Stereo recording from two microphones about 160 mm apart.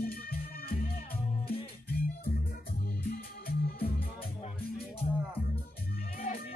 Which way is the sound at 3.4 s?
70° left (ahead or behind).